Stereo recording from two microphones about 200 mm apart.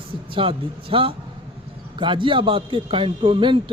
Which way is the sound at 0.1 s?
25° right (ahead or behind).